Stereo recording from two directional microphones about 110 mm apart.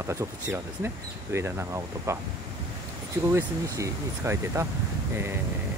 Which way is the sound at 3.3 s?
25° right (ahead or behind).